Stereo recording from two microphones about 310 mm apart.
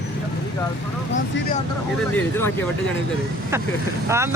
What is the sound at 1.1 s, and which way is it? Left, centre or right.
Speech, left.